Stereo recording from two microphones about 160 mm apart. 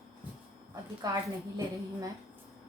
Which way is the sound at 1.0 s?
25° right (ahead or behind).